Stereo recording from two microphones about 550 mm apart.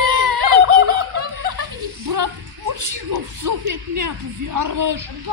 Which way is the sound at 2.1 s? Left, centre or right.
Right.